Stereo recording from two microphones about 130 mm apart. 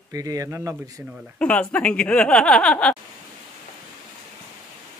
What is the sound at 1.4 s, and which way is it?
Speech, 10° left (ahead or behind).